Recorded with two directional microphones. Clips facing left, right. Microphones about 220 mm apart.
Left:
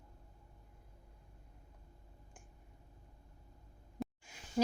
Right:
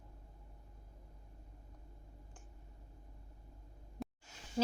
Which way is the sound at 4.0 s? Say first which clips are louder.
Left 3 dB; centre (ahead or behind).